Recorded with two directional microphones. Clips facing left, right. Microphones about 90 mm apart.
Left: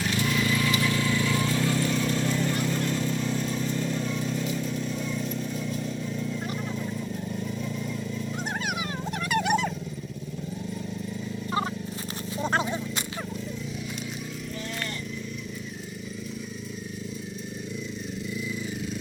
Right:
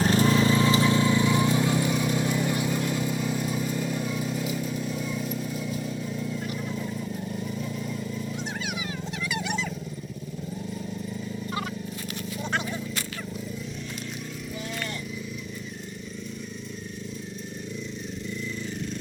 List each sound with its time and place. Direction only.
0.0 s vehicle: 35° right (ahead or behind); by 8.3 s 5° right (ahead or behind)
8.4 s a sound: 50° left (ahead or behind)
12.4 s horse: 35° left (ahead or behind)